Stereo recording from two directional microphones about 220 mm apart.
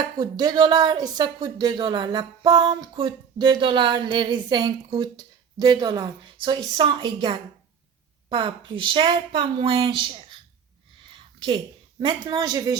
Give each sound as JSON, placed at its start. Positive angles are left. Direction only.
{"t": 0.0, "sound": "a woman's voice", "side_deg": -20}